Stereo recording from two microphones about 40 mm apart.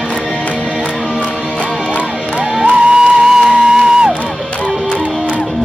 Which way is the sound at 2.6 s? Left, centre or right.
Right.